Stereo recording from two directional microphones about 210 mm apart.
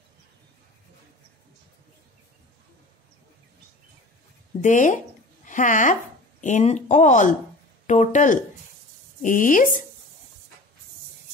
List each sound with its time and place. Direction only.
4.6 s speech: 35° left (ahead or behind)